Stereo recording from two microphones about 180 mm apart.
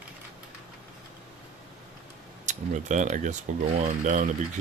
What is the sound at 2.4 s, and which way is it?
Speech, 45° right (ahead or behind).